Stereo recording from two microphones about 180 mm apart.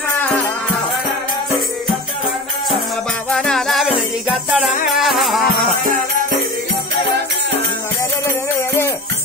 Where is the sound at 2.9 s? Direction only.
5° left (ahead or behind).